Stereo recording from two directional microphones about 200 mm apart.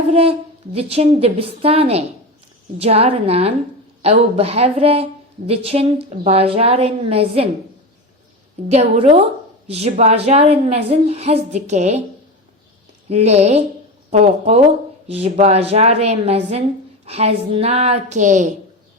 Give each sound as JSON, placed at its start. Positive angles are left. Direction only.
{"t": 0.1, "sound": "a woman's voice", "side_deg": -30}
{"t": 8.7, "sound": "a woman's voice", "side_deg": -30}
{"t": 13.1, "sound": "a woman's voice", "side_deg": -35}